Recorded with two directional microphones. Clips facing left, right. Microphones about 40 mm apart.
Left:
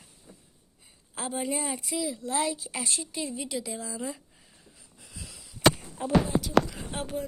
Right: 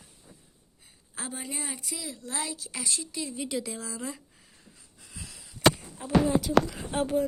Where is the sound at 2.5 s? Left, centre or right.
Centre.